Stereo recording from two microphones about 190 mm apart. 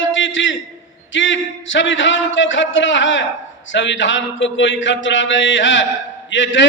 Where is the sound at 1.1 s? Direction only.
80° left.